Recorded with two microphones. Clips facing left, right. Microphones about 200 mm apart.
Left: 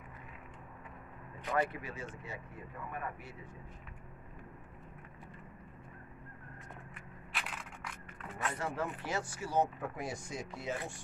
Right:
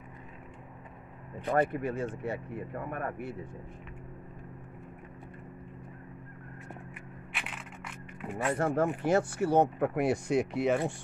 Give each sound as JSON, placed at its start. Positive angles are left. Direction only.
{"t": 1.5, "sound": "speech", "side_deg": -50}
{"t": 7.3, "sound": "a sound", "side_deg": -5}
{"t": 8.5, "sound": "speech", "side_deg": -50}